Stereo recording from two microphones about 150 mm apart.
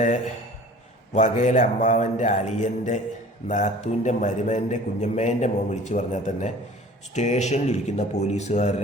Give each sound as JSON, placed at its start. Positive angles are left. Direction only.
{"t": 1.1, "sound": "a man's voice", "side_deg": 55}